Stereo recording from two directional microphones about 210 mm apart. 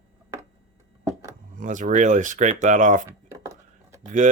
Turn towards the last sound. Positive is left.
turn(degrees=-15)  # may be behind; listen again after turning